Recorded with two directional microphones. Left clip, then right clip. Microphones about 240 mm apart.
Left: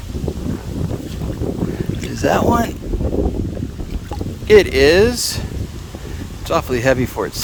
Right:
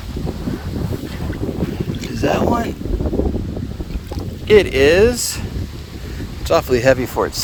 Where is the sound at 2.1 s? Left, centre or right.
Left.